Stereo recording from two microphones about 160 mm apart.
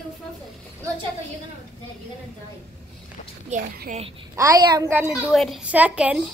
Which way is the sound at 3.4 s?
50° right (ahead or behind).